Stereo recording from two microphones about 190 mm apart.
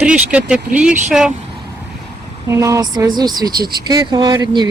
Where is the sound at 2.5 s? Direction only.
15° right (ahead or behind).